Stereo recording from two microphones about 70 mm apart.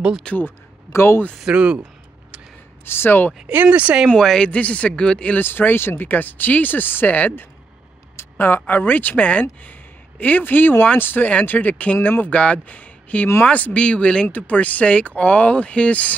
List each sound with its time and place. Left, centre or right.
0.3 s speech: centre
0.9 s speech: left
1.4 s speech: centre
2.8 s speech: left
3.4 s speech: centre
4.1 s speech: centre
4.5 s speech: left
5.4 s speech: left